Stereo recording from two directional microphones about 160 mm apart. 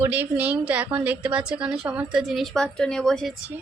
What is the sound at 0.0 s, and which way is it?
A woman's voice, 10° right (ahead or behind).